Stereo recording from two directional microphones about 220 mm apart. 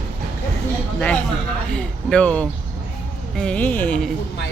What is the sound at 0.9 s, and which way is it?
Speech, 5° left (ahead or behind).